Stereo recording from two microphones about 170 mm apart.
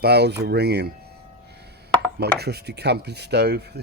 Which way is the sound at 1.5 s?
75° right (ahead or behind).